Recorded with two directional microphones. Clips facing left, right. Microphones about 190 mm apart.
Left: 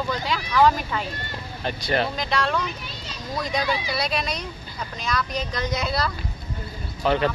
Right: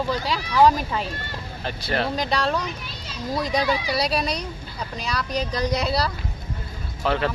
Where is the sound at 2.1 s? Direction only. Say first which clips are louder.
Right 2 dB; 35° right (ahead or behind).